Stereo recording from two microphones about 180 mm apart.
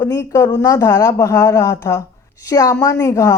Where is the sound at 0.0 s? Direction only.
15° left (ahead or behind).